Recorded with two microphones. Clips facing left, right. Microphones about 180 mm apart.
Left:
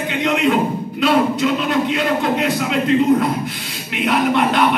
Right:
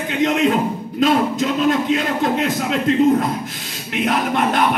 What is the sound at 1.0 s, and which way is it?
A man's voice, 45° right (ahead or behind).